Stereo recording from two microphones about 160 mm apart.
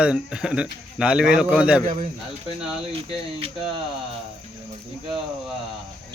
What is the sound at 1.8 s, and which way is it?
Speech, 45° right (ahead or behind).